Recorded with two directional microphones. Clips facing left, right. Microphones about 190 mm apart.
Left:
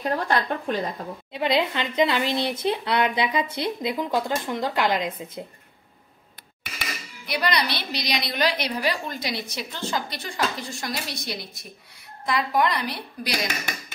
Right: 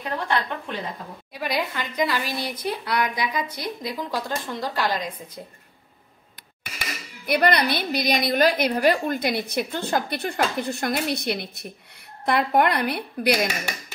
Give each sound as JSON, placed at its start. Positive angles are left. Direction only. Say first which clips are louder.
{"t": 0.0, "sound": "speech", "louder": "left 2 dB", "side_deg": 40}
{"t": 1.3, "sound": "speech", "louder": "left 4 dB", "side_deg": 25}
{"t": 7.2, "sound": "a woman's voice", "louder": "right 5 dB", "side_deg": -55}